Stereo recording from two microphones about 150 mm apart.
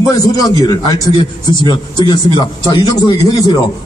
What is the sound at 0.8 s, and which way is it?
Speech, 30° left (ahead or behind).